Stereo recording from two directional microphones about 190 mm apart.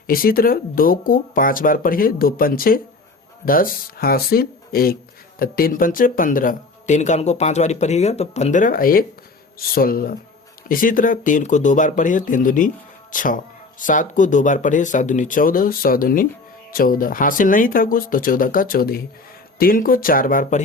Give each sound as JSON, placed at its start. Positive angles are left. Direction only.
{"t": 0.1, "sound": "speech", "side_deg": 50}